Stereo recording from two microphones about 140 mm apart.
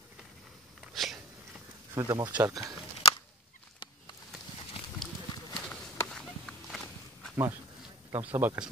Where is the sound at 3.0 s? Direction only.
45° left (ahead or behind).